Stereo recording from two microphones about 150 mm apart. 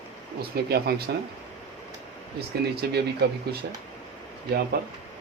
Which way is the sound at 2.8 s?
90° right.